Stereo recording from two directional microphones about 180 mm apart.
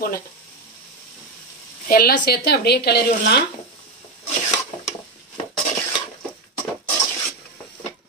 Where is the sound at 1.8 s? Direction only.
55° left (ahead or behind).